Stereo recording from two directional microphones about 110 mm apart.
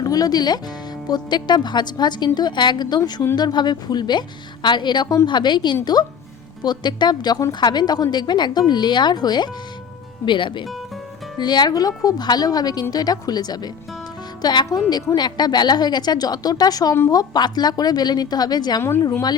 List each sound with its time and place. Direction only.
0.0 s a woman's voice: 35° left (ahead or behind)